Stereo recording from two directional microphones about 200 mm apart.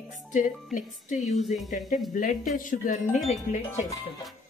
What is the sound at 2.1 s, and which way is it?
Speech, 40° left (ahead or behind).